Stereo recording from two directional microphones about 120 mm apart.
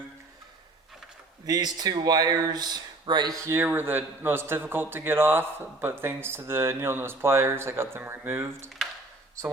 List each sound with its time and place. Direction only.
1.5 s speech: 35° right (ahead or behind)
3.4 s a man's voice: 20° right (ahead or behind)